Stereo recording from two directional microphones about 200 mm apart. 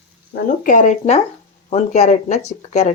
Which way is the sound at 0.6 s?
40° left (ahead or behind).